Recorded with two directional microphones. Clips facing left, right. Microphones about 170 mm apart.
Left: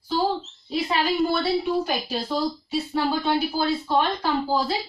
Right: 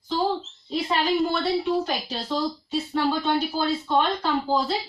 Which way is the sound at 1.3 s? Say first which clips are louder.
Left 1 dB; 10° left (ahead or behind).